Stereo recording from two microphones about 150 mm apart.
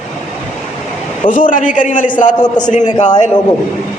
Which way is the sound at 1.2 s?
60° left (ahead or behind).